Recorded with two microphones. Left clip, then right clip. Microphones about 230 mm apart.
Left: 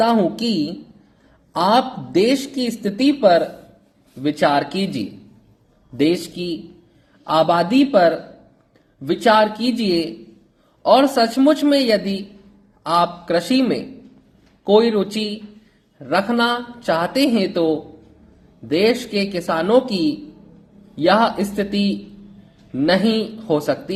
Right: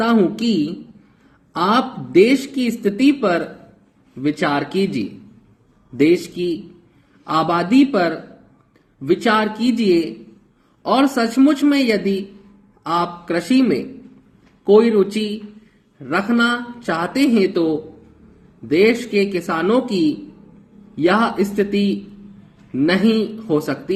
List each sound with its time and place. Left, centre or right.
0.0 s a man's voice: centre